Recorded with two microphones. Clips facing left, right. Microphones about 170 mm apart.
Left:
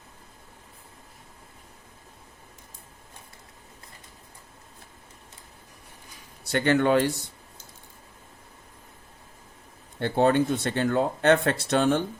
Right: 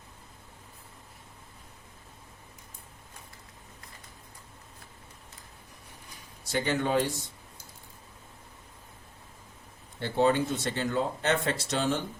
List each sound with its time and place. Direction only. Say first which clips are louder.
6.4 s speech: left 7 dB; 65° left (ahead or behind)
10.0 s speech: left 4 dB; 55° left (ahead or behind)